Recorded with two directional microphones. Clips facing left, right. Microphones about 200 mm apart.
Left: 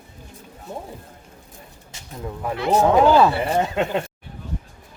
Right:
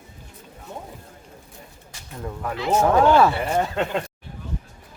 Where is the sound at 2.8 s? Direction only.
15° left (ahead or behind).